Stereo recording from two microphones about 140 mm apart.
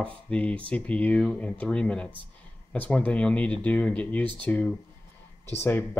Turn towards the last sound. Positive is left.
turn(degrees=15)  # may be behind; listen again after turning